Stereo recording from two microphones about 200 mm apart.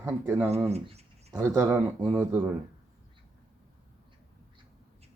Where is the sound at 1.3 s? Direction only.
15° right (ahead or behind).